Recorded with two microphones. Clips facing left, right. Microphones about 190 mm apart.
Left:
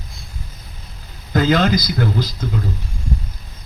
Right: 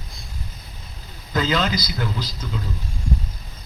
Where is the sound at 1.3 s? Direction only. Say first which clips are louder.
Left 6 dB; 50° left (ahead or behind).